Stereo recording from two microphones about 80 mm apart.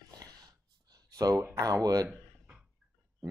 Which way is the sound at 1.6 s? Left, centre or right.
Right.